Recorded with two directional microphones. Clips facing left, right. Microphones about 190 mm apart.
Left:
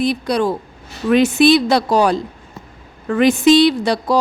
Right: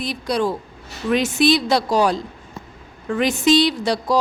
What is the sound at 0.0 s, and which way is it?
A woman's voice, 55° left (ahead or behind).